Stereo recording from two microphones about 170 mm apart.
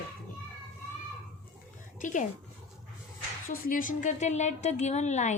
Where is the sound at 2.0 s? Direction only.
50° left (ahead or behind).